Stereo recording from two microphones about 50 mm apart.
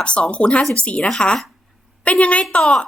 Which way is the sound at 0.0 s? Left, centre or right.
Left.